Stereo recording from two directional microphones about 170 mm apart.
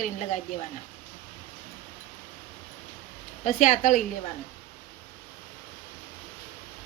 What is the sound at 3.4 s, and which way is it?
Speech, 50° left (ahead or behind).